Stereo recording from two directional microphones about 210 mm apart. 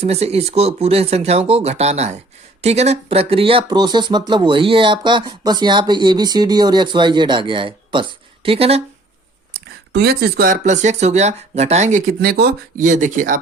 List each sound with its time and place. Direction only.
0.0 s speech: 30° right (ahead or behind)
9.9 s speech: 50° right (ahead or behind)